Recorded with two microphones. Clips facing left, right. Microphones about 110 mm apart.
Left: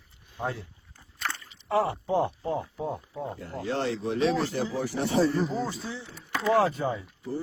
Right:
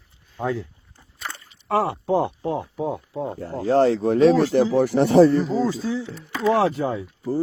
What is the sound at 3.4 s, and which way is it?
Speech, 40° right (ahead or behind).